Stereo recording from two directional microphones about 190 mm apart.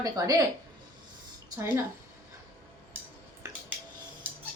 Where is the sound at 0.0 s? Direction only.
20° right (ahead or behind).